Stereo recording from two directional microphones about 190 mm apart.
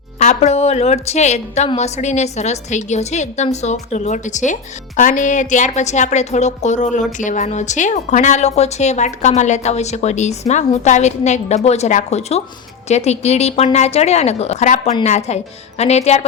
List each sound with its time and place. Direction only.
0.2 s a woman's voice: 35° left (ahead or behind)